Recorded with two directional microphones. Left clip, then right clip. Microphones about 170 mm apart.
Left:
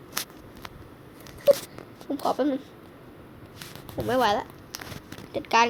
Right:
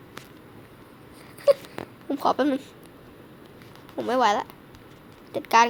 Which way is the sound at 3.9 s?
15° right (ahead or behind).